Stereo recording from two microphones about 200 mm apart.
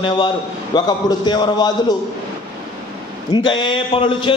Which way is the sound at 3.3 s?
25° left (ahead or behind).